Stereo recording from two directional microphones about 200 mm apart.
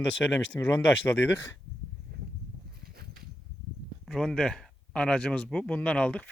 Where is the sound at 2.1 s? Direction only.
50° right (ahead or behind).